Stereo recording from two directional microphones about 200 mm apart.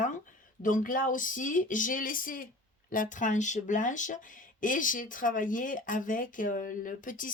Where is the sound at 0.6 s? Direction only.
40° left (ahead or behind).